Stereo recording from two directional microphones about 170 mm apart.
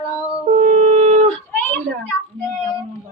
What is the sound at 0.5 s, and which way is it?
Shofar, 40° right (ahead or behind).